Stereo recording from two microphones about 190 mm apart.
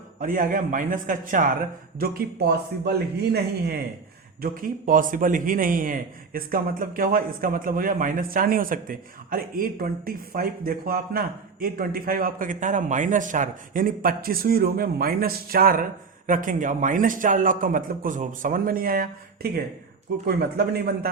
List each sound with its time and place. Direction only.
0.2 s a man's voice: 45° right (ahead or behind)
4.4 s a man's voice: 50° right (ahead or behind)